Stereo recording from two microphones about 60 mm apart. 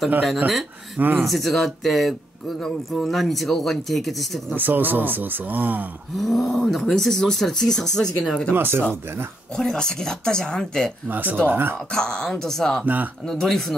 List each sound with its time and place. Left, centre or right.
0.9 s speech: right
1.2 s speech: centre
4.6 s speech: right
6.1 s speech: centre
8.5 s speech: right
9.6 s speech: centre
11.1 s speech: right
11.9 s speech: centre
12.8 s speech: right
13.3 s speech: centre